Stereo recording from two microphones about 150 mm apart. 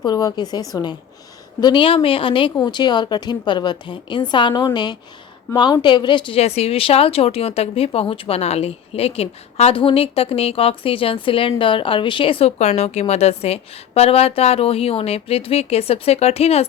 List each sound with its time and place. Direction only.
0.0 s a woman's voice: 25° left (ahead or behind); by 16.6 s 45° left (ahead or behind)